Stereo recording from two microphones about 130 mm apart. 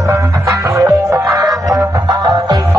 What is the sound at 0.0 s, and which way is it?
Music, 25° right (ahead or behind).